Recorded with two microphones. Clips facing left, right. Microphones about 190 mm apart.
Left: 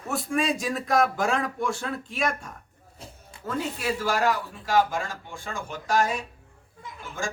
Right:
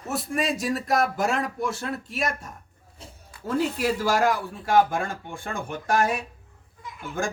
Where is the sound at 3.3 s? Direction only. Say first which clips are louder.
Right 3 dB; 25° left (ahead or behind).